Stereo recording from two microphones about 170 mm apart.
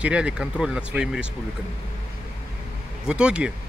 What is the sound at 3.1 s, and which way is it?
Speech, 5° right (ahead or behind).